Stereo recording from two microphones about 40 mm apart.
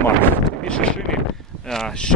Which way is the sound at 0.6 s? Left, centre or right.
Left.